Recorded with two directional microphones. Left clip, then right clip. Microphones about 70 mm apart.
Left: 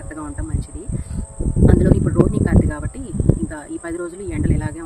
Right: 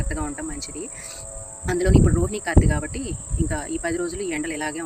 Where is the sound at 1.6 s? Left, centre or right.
Left.